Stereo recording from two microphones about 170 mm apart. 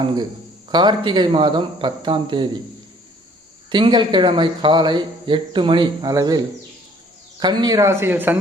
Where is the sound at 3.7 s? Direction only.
30° right (ahead or behind); by 8.3 s 10° right (ahead or behind).